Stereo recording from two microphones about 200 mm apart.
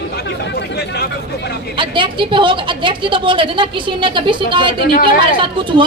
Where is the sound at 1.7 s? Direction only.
25° right (ahead or behind).